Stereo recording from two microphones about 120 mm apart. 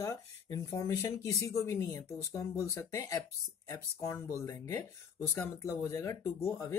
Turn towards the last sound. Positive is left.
turn(degrees=20)  # may be behind; listen again after turning